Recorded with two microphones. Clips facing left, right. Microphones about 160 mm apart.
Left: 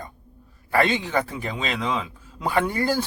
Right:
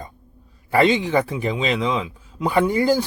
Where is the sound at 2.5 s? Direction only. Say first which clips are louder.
Right 4 dB; 15° right (ahead or behind).